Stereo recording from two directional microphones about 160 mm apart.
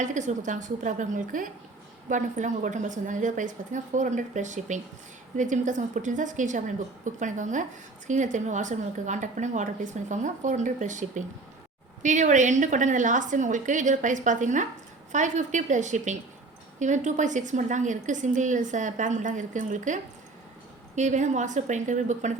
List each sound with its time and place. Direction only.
0.0 s a woman's voice: 50° right (ahead or behind)